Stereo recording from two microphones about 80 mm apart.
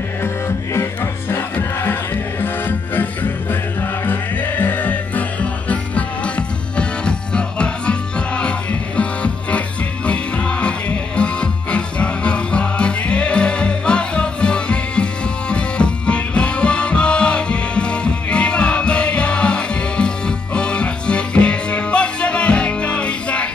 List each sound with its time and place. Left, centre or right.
1.3 s music: left